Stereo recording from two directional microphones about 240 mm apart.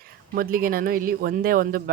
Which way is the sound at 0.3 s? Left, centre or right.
Right.